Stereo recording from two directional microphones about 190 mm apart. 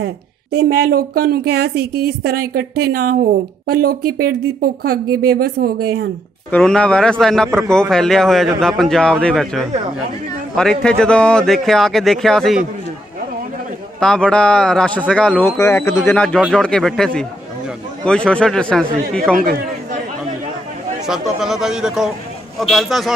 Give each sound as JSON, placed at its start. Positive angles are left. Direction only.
{"t": 0.0, "sound": "a woman's voice", "side_deg": -60}
{"t": 6.5, "sound": "speech", "side_deg": 5}
{"t": 13.9, "sound": "speech", "side_deg": 5}
{"t": 21.1, "sound": "speech", "side_deg": 0}